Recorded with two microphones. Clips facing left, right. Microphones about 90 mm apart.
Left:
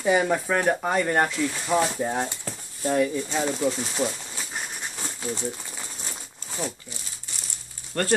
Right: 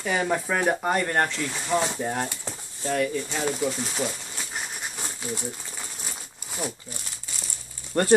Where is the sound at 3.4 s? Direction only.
Centre (ahead or behind).